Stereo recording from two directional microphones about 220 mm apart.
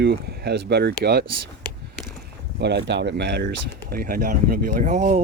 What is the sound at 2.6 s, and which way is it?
Speech, 50° right (ahead or behind).